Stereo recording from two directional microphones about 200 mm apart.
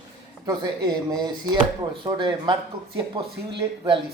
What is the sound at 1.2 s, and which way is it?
Speech, 20° right (ahead or behind).